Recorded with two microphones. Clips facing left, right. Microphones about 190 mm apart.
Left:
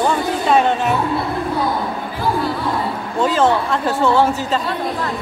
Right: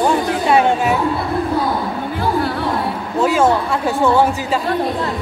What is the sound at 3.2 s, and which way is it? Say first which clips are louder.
Speech: right 1 dB; 10° right (ahead or behind).